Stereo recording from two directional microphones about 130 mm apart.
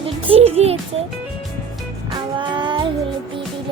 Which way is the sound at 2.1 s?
35° right (ahead or behind).